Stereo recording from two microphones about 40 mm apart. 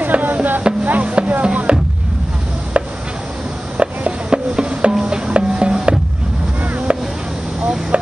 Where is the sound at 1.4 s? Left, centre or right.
Right.